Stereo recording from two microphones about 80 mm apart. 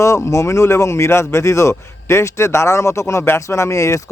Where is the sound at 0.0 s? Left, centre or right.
Left.